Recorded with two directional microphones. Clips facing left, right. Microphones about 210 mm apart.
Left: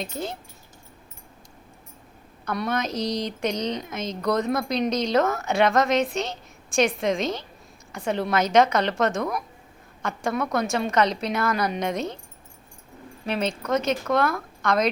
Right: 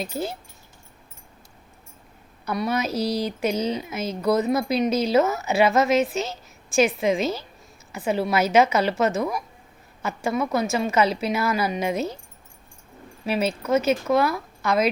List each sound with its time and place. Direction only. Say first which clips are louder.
0.0 s speech: right 2 dB; 5° right (ahead or behind)
2.4 s speech: right 2 dB; 5° right (ahead or behind)
13.2 s speech: right 2 dB; 5° right (ahead or behind)